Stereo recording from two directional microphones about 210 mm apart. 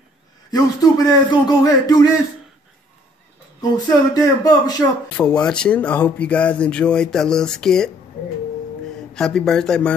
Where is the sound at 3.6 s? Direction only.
15° left (ahead or behind).